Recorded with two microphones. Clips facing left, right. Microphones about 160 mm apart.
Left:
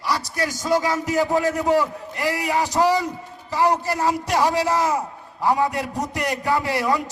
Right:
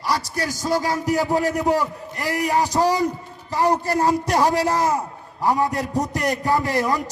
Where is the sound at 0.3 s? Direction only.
35° right (ahead or behind).